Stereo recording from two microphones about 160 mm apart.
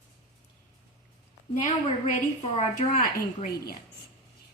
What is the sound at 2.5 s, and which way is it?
A woman's voice, 50° left (ahead or behind).